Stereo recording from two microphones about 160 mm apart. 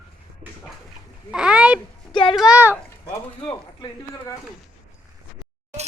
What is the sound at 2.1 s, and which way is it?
Speech, 35° left (ahead or behind).